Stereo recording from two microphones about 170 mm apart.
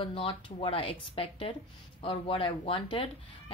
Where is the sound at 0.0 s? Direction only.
30° left (ahead or behind).